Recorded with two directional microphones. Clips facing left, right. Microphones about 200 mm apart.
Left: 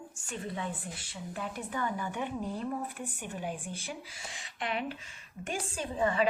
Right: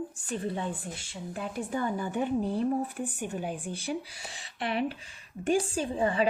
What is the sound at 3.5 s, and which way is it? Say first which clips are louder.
A woman's voice: right 7 dB; 35° right (ahead or behind).